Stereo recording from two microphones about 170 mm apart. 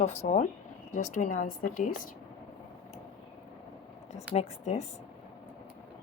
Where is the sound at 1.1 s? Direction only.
50° left (ahead or behind).